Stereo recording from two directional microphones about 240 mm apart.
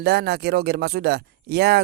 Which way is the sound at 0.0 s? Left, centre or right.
Right.